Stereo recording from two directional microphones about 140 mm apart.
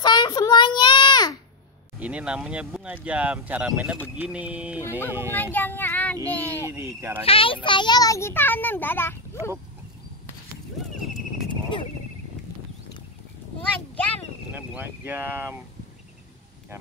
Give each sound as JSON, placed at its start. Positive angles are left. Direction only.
{"t": 0.0, "sound": "a sound", "side_deg": 30}
{"t": 2.0, "sound": "speech", "side_deg": -10}
{"t": 5.3, "sound": "a child's voice", "side_deg": 15}
{"t": 6.6, "sound": "speech", "side_deg": -20}
{"t": 7.2, "sound": "a child's voice", "side_deg": 40}
{"t": 13.6, "sound": "a sound", "side_deg": 10}
{"t": 14.5, "sound": "speech", "side_deg": -15}